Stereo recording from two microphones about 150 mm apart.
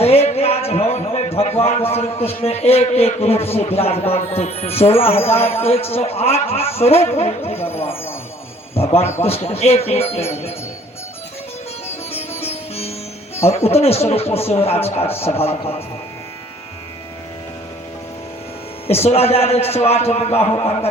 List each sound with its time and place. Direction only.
0.0 s a sound: 40° left (ahead or behind)
1.9 s a man's voice: 45° left (ahead or behind)
7.7 s music: 40° left (ahead or behind)
8.8 s a man's voice: 40° left (ahead or behind)
12.4 s sitar: 45° left (ahead or behind)
13.7 s a man's voice: 45° left (ahead or behind)
18.9 s a man's voice: 45° left (ahead or behind)